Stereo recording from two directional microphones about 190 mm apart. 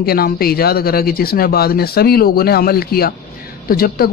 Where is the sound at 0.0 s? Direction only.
55° left (ahead or behind).